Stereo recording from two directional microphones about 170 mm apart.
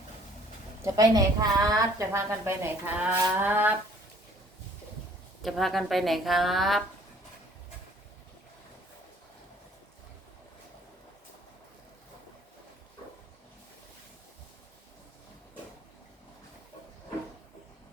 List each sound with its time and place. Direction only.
0.8 s a woman's voice: 20° right (ahead or behind)
5.4 s speech: centre (ahead or behind)